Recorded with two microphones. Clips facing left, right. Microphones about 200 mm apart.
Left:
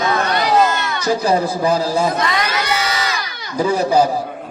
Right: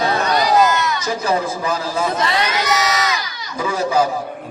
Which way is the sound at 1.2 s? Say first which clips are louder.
Left 3 dB; 35° left (ahead or behind).